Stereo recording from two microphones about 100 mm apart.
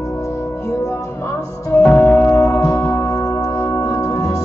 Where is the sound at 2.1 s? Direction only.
35° left (ahead or behind).